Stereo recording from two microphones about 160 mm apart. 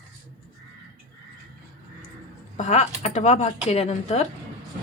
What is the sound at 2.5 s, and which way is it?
Speech, 45° left (ahead or behind).